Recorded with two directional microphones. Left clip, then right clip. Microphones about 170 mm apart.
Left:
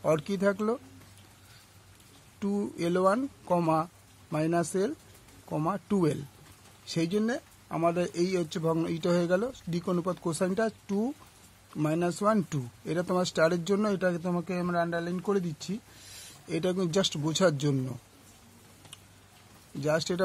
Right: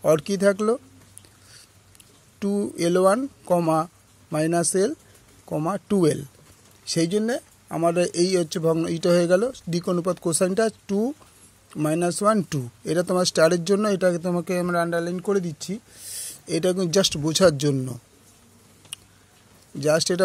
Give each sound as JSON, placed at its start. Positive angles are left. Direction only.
{"t": 0.0, "sound": "speech", "side_deg": -25}
{"t": 2.3, "sound": "speech", "side_deg": -25}
{"t": 19.8, "sound": "speech", "side_deg": -30}